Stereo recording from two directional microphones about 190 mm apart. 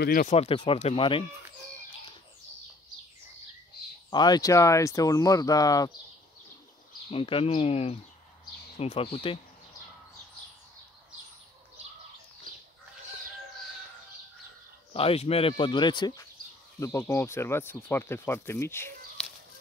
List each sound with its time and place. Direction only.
0.0 s speech: 50° left (ahead or behind)
0.3 s speech: 30° left (ahead or behind)
4.1 s speech: 20° left (ahead or behind)
7.1 s speech: 30° left (ahead or behind)
15.0 s speech: 30° left (ahead or behind); by 19.2 s 10° left (ahead or behind)